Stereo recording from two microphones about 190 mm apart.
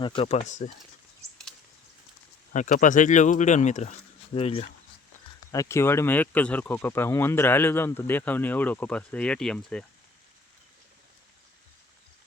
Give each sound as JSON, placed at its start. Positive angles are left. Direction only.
{"t": 0.0, "sound": "speech", "side_deg": 25}
{"t": 2.5, "sound": "speech", "side_deg": 40}
{"t": 5.5, "sound": "speech", "side_deg": 15}